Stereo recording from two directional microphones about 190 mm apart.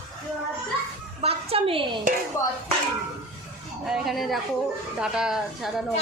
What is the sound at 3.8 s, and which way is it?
Speech, centre (ahead or behind).